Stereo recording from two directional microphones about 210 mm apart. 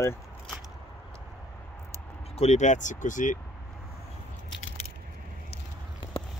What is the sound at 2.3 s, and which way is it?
Speech, 30° left (ahead or behind).